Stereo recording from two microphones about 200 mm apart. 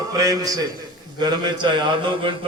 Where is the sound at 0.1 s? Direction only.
15° right (ahead or behind).